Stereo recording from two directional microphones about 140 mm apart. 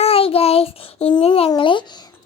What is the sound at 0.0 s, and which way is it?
Child singing, 45° left (ahead or behind).